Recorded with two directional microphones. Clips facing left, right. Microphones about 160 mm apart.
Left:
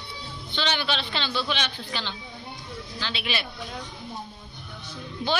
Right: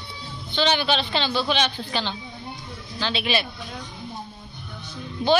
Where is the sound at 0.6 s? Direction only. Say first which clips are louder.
Right 6 dB; 15° right (ahead or behind).